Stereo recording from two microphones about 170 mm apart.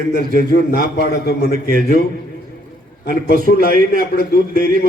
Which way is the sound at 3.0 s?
60° left (ahead or behind).